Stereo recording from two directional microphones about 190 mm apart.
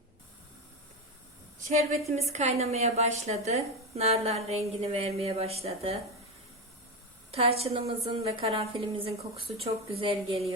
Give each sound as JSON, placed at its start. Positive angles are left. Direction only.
{"t": 1.6, "sound": "a woman's voice", "side_deg": -35}
{"t": 7.3, "sound": "a woman's voice", "side_deg": -30}